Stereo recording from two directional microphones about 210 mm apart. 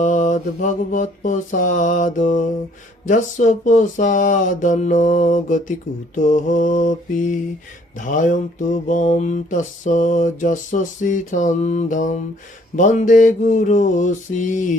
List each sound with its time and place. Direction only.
0.0 s mantra: 35° left (ahead or behind)